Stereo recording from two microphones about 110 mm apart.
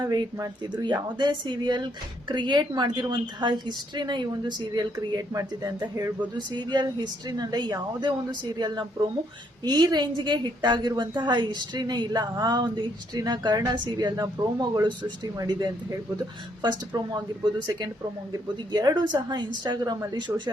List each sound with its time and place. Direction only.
0.0 s a woman's voice: 40° right (ahead or behind)
6.6 s a woman's voice: 45° right (ahead or behind)